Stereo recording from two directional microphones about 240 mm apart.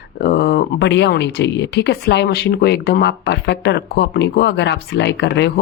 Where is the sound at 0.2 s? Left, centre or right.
Left.